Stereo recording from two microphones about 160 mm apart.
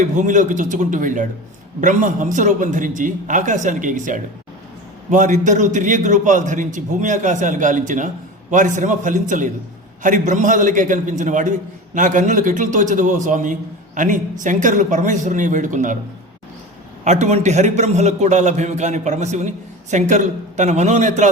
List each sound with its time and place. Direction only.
0.0 s a man's voice: 50° right (ahead or behind)
17.0 s a man's voice: 45° right (ahead or behind)